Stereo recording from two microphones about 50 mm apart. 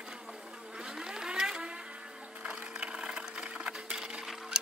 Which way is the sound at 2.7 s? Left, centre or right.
Centre.